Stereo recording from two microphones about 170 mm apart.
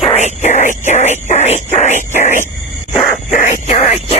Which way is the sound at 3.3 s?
45° left (ahead or behind).